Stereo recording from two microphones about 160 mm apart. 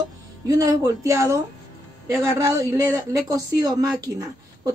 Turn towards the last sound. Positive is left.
turn(degrees=-20)  # may be behind; listen again after turning